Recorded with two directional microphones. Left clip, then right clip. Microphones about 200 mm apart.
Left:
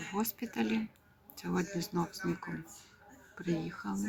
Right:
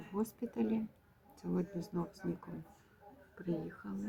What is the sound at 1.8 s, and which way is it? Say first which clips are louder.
Speech: left 6 dB; 25° left (ahead or behind).